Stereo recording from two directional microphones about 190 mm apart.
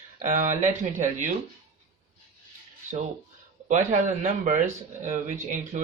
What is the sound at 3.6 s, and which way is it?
Speech, 40° right (ahead or behind).